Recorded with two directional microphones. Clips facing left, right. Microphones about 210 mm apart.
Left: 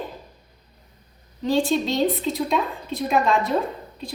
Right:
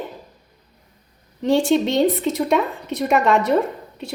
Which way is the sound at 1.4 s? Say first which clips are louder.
Right 4 dB; 70° right (ahead or behind).